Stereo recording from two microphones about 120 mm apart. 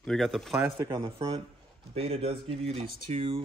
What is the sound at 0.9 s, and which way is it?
Speech, 50° right (ahead or behind).